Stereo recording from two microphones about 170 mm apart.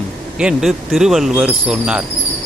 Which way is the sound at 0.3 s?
5° right (ahead or behind).